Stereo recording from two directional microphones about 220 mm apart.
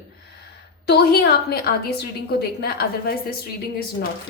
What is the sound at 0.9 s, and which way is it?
A woman's voice, 45° left (ahead or behind).